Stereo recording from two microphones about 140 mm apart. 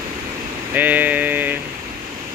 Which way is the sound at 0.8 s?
10° right (ahead or behind).